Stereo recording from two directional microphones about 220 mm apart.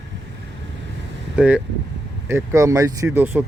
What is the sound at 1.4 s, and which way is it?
Speech, 5° right (ahead or behind).